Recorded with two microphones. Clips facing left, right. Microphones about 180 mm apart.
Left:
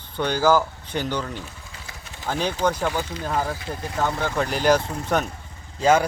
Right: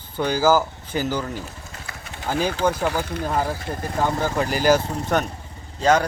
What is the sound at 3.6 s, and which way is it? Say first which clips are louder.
Speech: right 3 dB; 50° right (ahead or behind).